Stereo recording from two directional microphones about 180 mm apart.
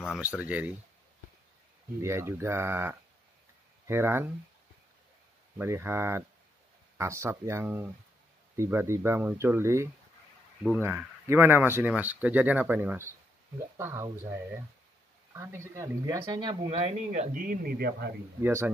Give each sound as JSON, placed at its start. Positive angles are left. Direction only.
{"t": 0.4, "sound": "speech", "side_deg": -10}
{"t": 2.0, "sound": "speech", "side_deg": -15}
{"t": 5.6, "sound": "speech", "side_deg": -15}
{"t": 15.3, "sound": "speech", "side_deg": -15}
{"t": 16.9, "sound": "speech", "side_deg": -40}
{"t": 18.4, "sound": "speech", "side_deg": -15}